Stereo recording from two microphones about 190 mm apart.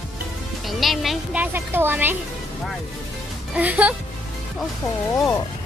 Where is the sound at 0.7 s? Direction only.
Centre (ahead or behind).